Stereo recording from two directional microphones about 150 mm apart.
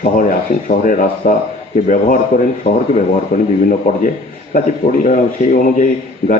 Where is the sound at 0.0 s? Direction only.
65° left (ahead or behind).